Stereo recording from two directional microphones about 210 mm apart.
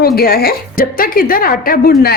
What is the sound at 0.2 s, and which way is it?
A woman's voice, 45° left (ahead or behind).